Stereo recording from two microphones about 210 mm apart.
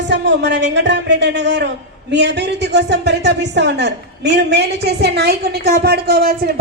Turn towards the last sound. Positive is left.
turn(degrees=-45)  # may be behind; listen again after turning